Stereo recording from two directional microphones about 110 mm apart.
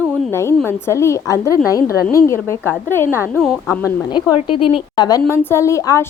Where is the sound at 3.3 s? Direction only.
Centre (ahead or behind).